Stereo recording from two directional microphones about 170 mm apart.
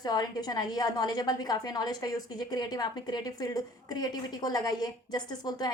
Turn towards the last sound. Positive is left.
turn(degrees=25)  # may be behind; listen again after turning